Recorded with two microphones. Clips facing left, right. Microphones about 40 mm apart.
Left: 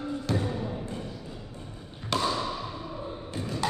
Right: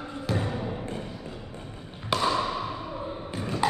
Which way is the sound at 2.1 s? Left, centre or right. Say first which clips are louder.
Right 3 dB; centre.